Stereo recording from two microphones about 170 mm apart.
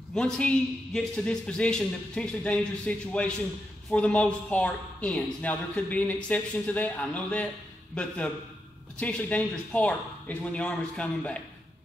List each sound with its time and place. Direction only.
0.1 s a man's voice: 5° left (ahead or behind)